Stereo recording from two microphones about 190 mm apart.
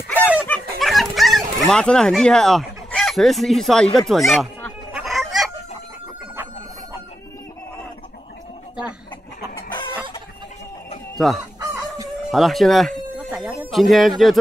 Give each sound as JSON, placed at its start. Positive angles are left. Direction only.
{"t": 0.5, "sound": "a sound", "side_deg": 0}
{"t": 4.1, "sound": "chicken", "side_deg": 0}
{"t": 11.1, "sound": "chicken", "side_deg": 0}
{"t": 12.3, "sound": "speech", "side_deg": 0}